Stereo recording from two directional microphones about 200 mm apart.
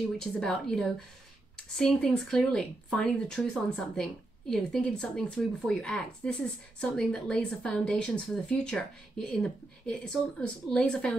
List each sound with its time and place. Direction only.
0.2 s speech: centre (ahead or behind)